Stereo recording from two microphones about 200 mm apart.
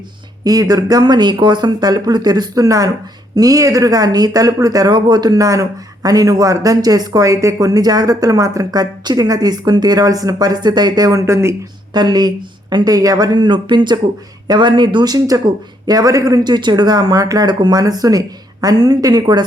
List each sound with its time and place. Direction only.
0.4 s speech: 20° right (ahead or behind)